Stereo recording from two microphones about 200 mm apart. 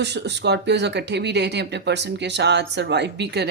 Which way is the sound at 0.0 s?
60° right (ahead or behind).